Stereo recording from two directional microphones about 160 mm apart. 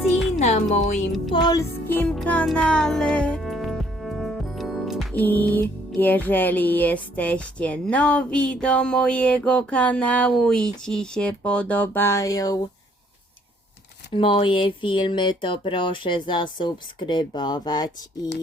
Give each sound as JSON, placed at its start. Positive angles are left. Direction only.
{"t": 0.3, "sound": "speech", "side_deg": 45}
{"t": 1.3, "sound": "speech", "side_deg": 25}
{"t": 1.9, "sound": "music", "side_deg": 10}
{"t": 5.1, "sound": "music", "side_deg": 10}
{"t": 14.1, "sound": "speech", "side_deg": 35}